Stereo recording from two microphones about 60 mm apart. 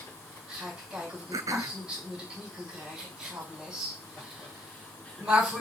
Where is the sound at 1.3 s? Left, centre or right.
Right.